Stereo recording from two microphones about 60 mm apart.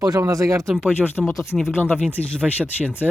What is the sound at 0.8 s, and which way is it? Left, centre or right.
Speech, centre.